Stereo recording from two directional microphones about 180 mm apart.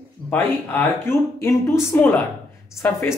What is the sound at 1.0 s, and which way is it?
Speech, 15° left (ahead or behind).